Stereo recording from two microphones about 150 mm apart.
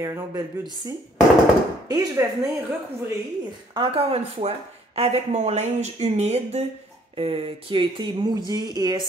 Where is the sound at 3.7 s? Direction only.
35° right (ahead or behind).